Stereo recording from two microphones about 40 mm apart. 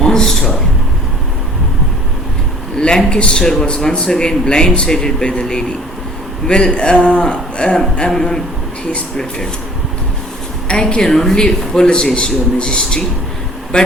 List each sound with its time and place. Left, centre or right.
0.0 s a man's voice: centre
2.7 s a sound: centre
3.1 s speech: left
8.1 s a man's voice: centre
10.7 s speech: left